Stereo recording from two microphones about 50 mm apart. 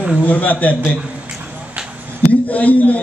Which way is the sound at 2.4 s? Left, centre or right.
Left.